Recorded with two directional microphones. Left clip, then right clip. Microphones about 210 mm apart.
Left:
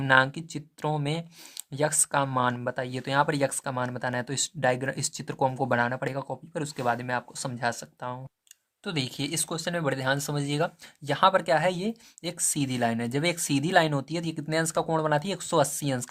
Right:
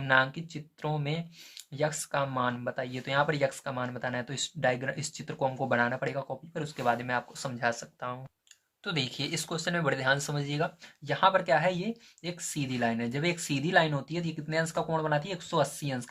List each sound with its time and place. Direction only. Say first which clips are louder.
0.0 s speech: left 4 dB; 45° left (ahead or behind)